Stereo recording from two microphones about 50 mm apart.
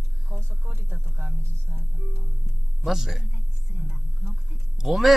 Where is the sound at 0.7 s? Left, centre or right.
Right.